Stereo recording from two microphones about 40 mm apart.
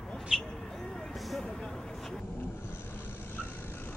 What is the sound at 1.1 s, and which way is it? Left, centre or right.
Vehicle, centre.